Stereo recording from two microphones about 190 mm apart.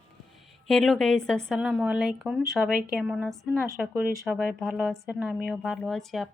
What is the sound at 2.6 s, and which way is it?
Speech, 50° right (ahead or behind).